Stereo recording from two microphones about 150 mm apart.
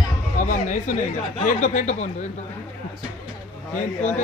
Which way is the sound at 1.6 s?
55° left (ahead or behind).